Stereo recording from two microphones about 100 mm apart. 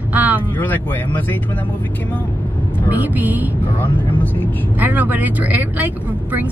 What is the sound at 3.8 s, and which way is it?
Speech, 15° left (ahead or behind).